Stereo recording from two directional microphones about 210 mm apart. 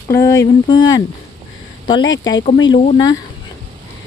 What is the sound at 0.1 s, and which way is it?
Speech, 15° left (ahead or behind).